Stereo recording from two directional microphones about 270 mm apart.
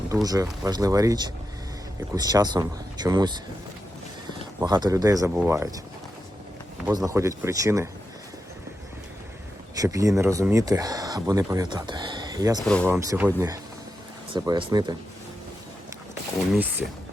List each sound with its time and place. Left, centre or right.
0.1 s speech: centre
6.8 s speech: centre
9.7 s speech: centre
12.5 s speech: centre
12.9 s speech: centre